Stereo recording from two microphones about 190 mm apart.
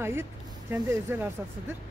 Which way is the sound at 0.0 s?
10° right (ahead or behind).